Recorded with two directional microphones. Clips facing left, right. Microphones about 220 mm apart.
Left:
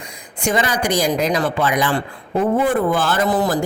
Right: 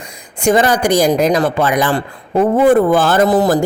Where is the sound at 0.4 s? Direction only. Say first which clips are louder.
Right 7 dB; 45° right (ahead or behind).